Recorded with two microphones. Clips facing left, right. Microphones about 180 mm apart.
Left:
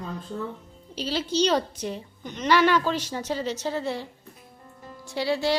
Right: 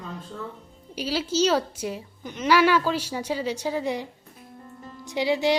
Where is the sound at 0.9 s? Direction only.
10° right (ahead or behind).